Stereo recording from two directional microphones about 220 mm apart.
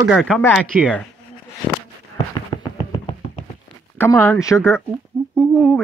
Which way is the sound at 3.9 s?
10° left (ahead or behind).